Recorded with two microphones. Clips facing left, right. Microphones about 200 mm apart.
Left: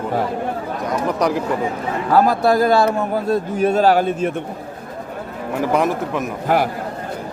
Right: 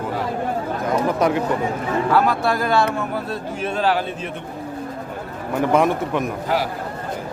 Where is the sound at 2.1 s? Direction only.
40° left (ahead or behind).